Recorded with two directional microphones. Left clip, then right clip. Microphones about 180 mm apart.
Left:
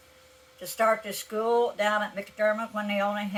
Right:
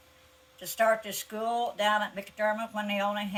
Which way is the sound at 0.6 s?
15° left (ahead or behind).